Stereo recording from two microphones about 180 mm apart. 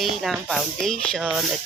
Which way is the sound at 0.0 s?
Centre (ahead or behind).